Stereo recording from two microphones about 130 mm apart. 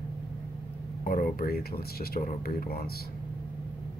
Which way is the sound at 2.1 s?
90° left.